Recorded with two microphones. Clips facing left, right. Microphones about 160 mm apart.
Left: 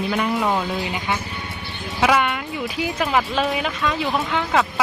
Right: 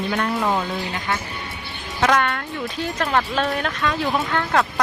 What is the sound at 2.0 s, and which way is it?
Speech, 10° left (ahead or behind).